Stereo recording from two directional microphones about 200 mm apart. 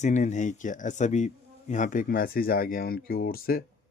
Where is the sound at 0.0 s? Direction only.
35° left (ahead or behind).